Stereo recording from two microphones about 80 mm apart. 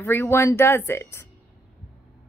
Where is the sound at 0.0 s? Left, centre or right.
Left.